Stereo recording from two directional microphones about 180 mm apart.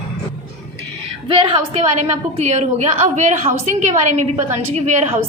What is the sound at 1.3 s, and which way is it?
A woman's voice, 30° right (ahead or behind).